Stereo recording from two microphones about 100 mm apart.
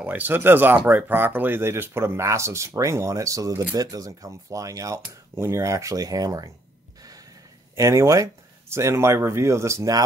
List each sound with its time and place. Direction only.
0.0 s speech: 20° right (ahead or behind); by 6.5 s 35° right (ahead or behind)
7.7 s speech: 30° right (ahead or behind)